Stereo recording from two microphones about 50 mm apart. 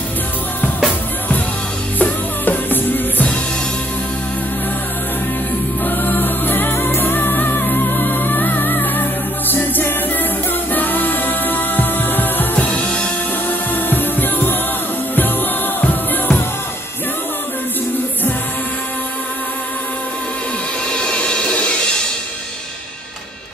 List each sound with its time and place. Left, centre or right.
2.0 s music: left
5.9 s music: left
15.8 s music: left
20.9 s music: left